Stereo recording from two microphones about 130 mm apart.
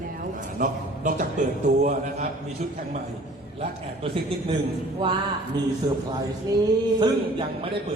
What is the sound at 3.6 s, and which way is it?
Speech, 45° right (ahead or behind).